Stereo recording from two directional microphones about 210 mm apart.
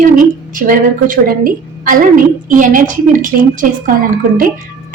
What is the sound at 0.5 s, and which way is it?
A woman's voice, 40° right (ahead or behind).